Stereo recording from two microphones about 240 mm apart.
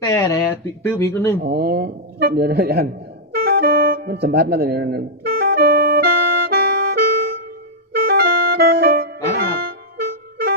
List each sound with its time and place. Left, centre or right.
0.0 s speech: centre
1.5 s speech: right
3.3 s music: right
7.9 s music: right